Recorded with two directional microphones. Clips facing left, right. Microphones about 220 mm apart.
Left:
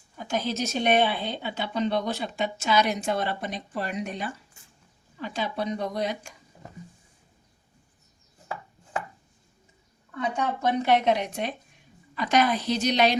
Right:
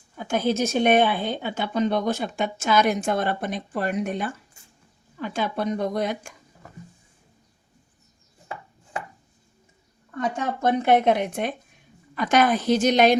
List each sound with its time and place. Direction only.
0.2 s a woman's voice: 50° right (ahead or behind)
10.2 s a woman's voice: 45° right (ahead or behind)